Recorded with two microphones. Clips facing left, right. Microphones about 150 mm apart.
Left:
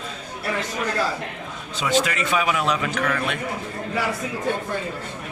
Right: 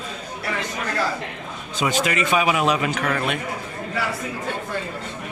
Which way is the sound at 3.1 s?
30° right (ahead or behind).